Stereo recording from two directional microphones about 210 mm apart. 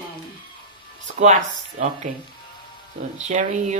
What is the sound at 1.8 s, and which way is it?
Speech, 35° right (ahead or behind).